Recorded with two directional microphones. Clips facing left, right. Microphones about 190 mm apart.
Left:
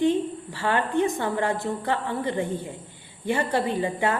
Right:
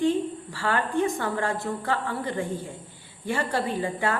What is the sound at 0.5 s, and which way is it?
A woman's voice, 20° left (ahead or behind).